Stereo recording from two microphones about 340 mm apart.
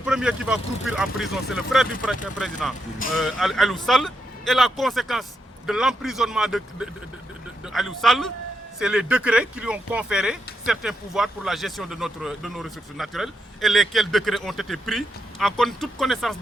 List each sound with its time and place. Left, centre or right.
0.0 s speech: centre